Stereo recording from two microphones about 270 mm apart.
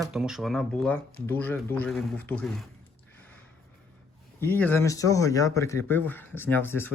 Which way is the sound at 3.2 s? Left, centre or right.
Centre.